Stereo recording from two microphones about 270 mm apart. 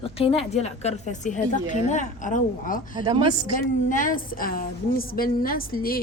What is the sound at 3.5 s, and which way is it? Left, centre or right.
A woman's voice, left.